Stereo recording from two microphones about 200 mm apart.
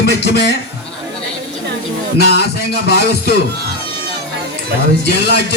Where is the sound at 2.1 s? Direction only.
55° left (ahead or behind).